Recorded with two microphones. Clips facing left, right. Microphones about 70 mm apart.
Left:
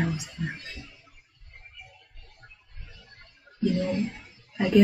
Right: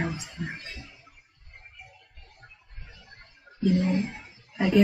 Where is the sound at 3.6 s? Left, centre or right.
Right.